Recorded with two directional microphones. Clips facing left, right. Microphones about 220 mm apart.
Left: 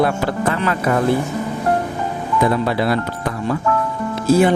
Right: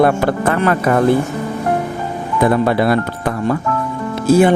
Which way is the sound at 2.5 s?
50° right (ahead or behind).